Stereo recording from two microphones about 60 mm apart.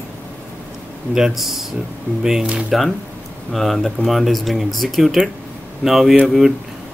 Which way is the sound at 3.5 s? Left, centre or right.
Centre.